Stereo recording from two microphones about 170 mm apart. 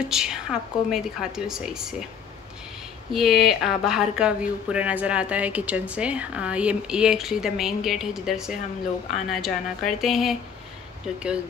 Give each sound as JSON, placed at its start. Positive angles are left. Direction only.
{"t": 0.0, "sound": "speech", "side_deg": -5}
{"t": 3.1, "sound": "speech", "side_deg": 0}